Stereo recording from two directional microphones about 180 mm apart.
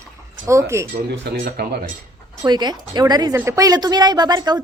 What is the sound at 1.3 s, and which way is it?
Speech, 55° right (ahead or behind).